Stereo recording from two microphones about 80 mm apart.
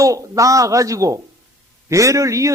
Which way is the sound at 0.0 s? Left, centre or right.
Right.